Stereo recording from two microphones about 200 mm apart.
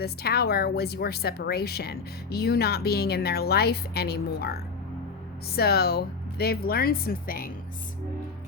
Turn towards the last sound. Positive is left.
turn(degrees=45)  # may be behind; listen again after turning